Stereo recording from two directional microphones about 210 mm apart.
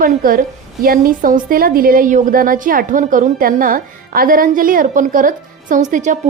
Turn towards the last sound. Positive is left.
turn(degrees=-35)  # may be behind; listen again after turning